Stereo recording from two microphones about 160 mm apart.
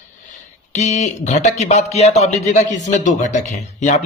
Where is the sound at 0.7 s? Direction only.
45° left (ahead or behind).